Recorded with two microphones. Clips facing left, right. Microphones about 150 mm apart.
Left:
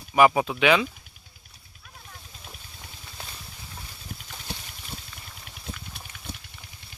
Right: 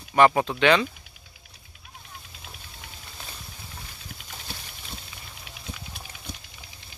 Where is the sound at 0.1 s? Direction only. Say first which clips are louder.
Even; 5° left (ahead or behind).